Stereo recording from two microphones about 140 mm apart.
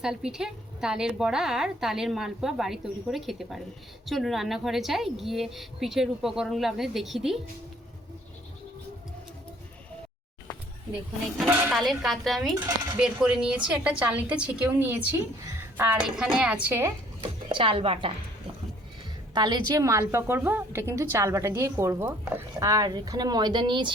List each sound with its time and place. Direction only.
0.0 s a woman's voice: 5° right (ahead or behind)
11.7 s a woman's voice: centre (ahead or behind)
17.5 s speech: 40° right (ahead or behind)
19.3 s a woman's voice: 30° right (ahead or behind)